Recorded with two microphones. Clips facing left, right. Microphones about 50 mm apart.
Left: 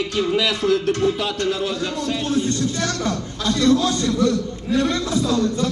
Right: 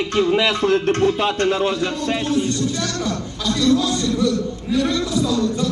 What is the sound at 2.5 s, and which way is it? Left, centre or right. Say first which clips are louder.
A man's voice: even; left.